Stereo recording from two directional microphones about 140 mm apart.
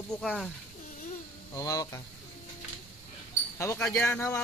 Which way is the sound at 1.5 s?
25° left (ahead or behind).